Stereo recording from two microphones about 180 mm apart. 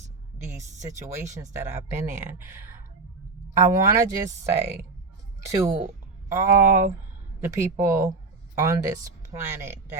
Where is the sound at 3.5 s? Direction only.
15° right (ahead or behind).